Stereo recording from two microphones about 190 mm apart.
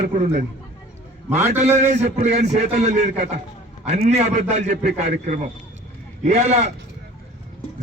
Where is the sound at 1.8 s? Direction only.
35° right (ahead or behind).